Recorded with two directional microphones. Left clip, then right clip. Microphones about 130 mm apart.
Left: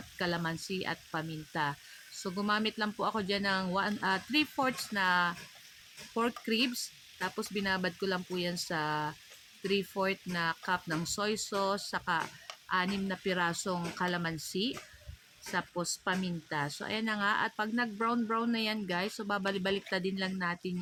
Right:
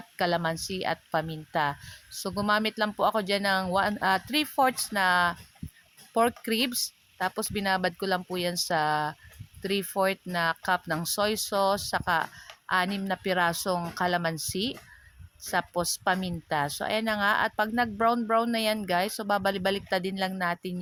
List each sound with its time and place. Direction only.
0.2 s speech: 65° right (ahead or behind)